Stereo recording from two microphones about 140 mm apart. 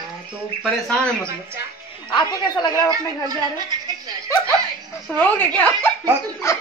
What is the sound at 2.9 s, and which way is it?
Speech, 25° right (ahead or behind).